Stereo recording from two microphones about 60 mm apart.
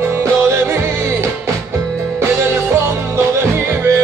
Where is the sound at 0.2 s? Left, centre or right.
Right.